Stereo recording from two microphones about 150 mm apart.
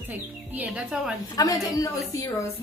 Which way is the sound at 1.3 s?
25° left (ahead or behind).